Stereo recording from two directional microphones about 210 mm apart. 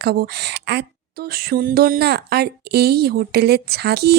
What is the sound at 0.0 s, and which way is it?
Speech, 50° right (ahead or behind).